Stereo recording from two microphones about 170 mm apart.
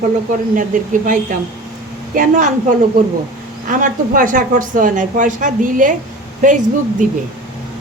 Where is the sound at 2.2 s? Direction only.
50° right (ahead or behind).